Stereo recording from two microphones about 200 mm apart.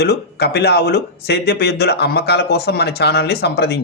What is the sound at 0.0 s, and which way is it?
Speech, 55° left (ahead or behind).